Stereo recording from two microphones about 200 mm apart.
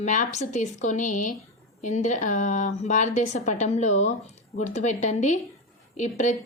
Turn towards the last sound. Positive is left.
turn(degrees=35)  # may be behind; listen again after turning